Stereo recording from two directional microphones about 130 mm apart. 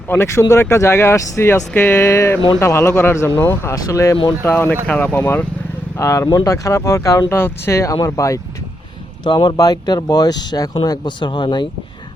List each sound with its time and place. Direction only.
0.1 s speech: 20° left (ahead or behind); by 11.7 s 35° left (ahead or behind)